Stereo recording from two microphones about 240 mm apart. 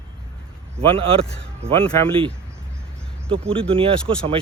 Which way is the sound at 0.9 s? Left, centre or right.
Right.